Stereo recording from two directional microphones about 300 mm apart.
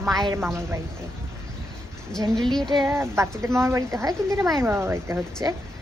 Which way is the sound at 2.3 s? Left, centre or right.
Centre.